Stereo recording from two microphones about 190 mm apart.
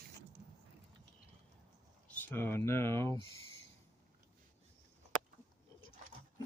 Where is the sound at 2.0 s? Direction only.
10° left (ahead or behind).